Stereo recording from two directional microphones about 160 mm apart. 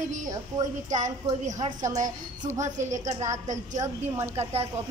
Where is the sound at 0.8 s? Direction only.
50° right (ahead or behind).